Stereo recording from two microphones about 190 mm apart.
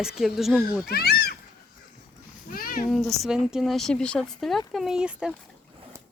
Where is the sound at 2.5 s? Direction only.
50° left (ahead or behind).